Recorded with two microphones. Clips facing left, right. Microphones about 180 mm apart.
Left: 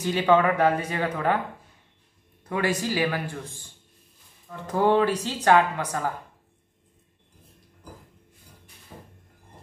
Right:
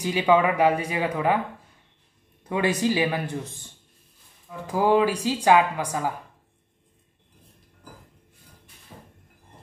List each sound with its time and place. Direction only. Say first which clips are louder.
0.0 s a woman's voice: even; 10° right (ahead or behind)
2.4 s a man's voice: right 3 dB; 20° right (ahead or behind)
4.5 s a woman's voice: even; 10° right (ahead or behind)